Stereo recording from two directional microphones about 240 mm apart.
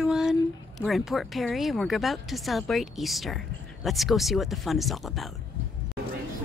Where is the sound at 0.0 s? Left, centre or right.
Centre.